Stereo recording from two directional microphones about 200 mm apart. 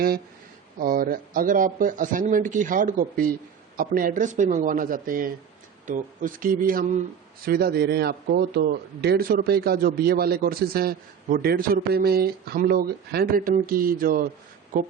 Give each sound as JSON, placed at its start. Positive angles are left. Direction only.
{"t": 0.8, "sound": "speech", "side_deg": -45}